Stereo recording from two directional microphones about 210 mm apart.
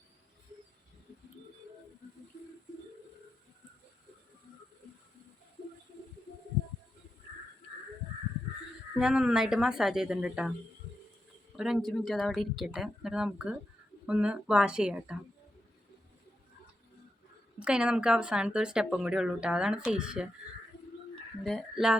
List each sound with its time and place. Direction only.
9.0 s speech: 5° right (ahead or behind)
11.5 s speech: centre (ahead or behind)
17.6 s speech: 5° right (ahead or behind)
21.4 s speech: centre (ahead or behind)